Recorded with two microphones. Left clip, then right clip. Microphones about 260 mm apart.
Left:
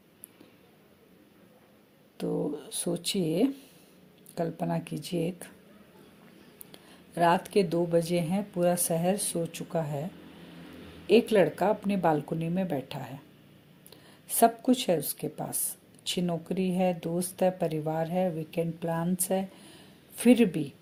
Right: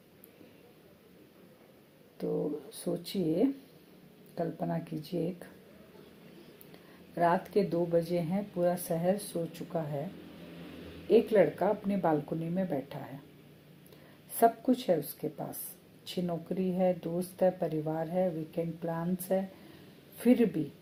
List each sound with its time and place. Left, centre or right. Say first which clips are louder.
2.1 s speech: left 2 dB; left
7.2 s speech: left 4 dB; left
11.1 s speech: left 2 dB; left
14.3 s speech: left 3 dB; left